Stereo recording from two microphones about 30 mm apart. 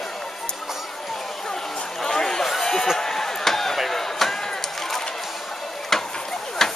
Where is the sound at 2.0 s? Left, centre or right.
Centre.